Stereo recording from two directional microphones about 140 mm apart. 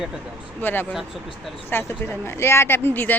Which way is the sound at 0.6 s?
15° left (ahead or behind).